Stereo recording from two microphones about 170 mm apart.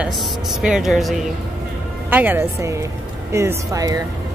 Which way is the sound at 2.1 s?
10° right (ahead or behind).